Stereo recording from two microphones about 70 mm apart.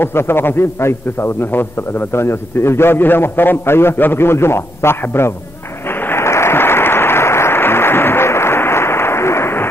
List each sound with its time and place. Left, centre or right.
0.0 s a man's voice: left
5.9 s applause: left